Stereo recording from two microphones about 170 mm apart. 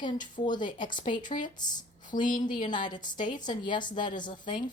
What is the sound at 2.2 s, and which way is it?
Speech, 50° left (ahead or behind).